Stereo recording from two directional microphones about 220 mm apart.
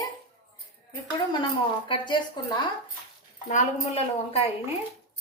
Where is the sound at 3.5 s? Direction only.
30° left (ahead or behind).